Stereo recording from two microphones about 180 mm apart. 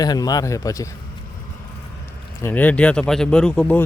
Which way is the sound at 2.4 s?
10° left (ahead or behind).